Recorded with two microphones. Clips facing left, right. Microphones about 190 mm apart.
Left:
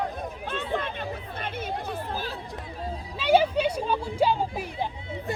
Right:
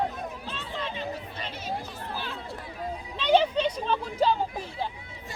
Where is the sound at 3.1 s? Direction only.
10° left (ahead or behind).